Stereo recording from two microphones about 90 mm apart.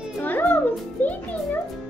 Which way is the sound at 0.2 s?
20° left (ahead or behind).